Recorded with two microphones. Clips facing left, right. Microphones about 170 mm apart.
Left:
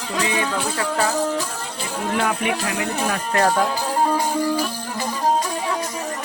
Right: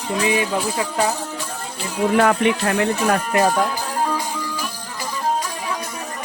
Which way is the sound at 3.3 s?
15° right (ahead or behind).